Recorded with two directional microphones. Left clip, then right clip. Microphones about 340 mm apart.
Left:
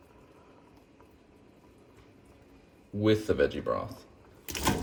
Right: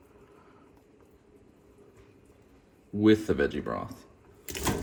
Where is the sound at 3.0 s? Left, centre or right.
Centre.